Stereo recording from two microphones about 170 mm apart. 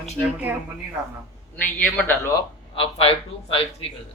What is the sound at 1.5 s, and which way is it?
Speech, 5° left (ahead or behind).